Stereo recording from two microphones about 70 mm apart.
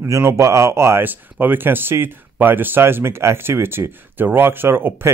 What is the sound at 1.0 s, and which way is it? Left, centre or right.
Speech, right.